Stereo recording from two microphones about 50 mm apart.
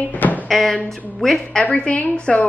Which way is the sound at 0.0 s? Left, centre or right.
Left.